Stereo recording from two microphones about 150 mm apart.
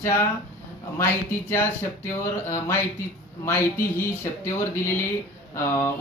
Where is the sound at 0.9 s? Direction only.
15° left (ahead or behind).